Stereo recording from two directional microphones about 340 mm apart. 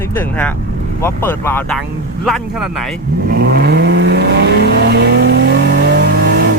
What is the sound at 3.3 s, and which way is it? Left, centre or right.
Vehicle, right.